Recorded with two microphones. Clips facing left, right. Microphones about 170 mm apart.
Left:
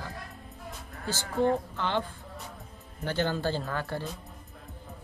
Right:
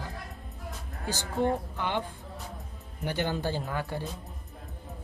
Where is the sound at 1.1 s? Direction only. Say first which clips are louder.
Left 2 dB; 15° right (ahead or behind).